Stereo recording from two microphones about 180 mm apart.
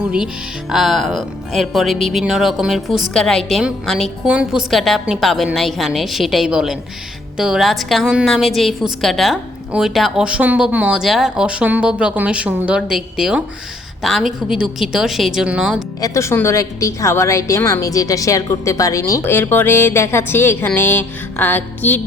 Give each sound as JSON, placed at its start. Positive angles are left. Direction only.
{"t": 0.7, "sound": "speech", "side_deg": 0}
{"t": 16.0, "sound": "a woman's voice", "side_deg": 20}